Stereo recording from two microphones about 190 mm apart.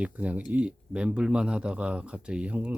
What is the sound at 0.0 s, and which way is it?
A man's voice, 5° right (ahead or behind).